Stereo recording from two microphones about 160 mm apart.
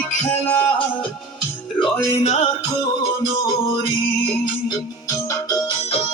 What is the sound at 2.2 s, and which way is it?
Music, 45° left (ahead or behind).